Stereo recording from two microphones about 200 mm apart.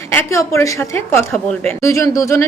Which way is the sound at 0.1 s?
15° left (ahead or behind).